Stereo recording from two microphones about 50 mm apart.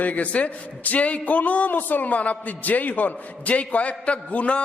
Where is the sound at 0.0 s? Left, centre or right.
Left.